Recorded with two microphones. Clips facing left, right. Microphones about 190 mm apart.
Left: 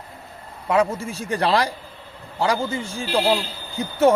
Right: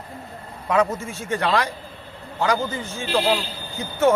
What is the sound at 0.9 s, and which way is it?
Speech, 35° left (ahead or behind).